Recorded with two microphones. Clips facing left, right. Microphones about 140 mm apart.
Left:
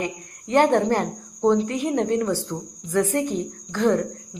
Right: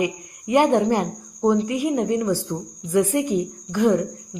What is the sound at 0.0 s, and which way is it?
Speech, 10° right (ahead or behind).